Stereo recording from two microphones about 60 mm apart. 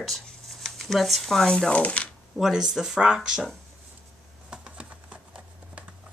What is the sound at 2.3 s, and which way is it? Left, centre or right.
Speech, centre.